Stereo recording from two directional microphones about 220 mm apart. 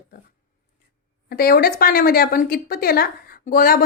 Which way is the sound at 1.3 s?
45° left (ahead or behind).